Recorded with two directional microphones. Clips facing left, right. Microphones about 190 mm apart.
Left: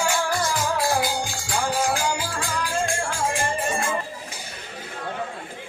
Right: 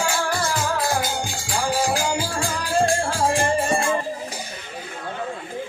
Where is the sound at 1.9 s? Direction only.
35° right (ahead or behind).